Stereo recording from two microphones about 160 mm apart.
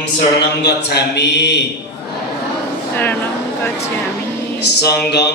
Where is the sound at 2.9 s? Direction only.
10° left (ahead or behind).